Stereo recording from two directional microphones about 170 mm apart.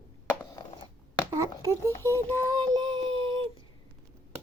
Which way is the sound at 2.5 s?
25° right (ahead or behind).